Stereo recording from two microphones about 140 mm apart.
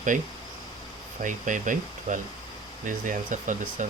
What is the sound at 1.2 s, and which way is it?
Speech, 65° right (ahead or behind).